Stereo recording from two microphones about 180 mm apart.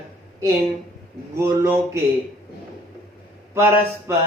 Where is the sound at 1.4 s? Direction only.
15° right (ahead or behind).